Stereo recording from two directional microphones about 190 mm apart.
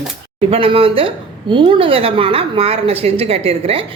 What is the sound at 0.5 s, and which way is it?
A woman's voice, 30° right (ahead or behind).